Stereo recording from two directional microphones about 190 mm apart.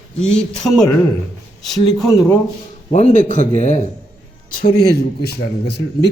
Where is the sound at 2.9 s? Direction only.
40° left (ahead or behind).